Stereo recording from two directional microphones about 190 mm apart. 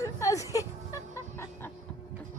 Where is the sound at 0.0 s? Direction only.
15° left (ahead or behind).